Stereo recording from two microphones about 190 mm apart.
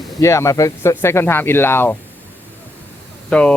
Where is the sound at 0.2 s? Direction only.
15° left (ahead or behind).